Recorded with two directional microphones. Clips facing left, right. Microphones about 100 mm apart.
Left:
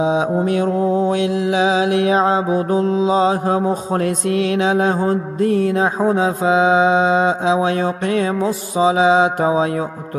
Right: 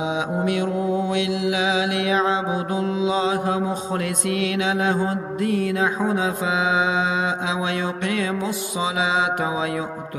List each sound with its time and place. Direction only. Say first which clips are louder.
0.0 s mantra: left 6 dB; 35° left (ahead or behind)